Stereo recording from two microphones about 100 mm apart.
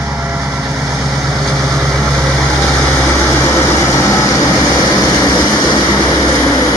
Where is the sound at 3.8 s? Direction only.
25° left (ahead or behind).